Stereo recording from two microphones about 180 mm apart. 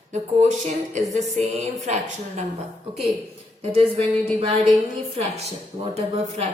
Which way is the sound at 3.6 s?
35° right (ahead or behind).